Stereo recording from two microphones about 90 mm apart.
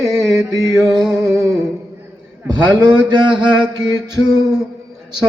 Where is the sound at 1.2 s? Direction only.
40° right (ahead or behind).